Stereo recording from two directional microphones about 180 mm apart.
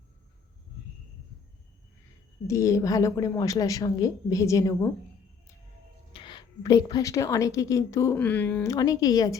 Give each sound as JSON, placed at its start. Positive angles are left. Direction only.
{"t": 2.5, "sound": "a woman's voice", "side_deg": 15}
{"t": 6.1, "sound": "a woman's voice", "side_deg": 25}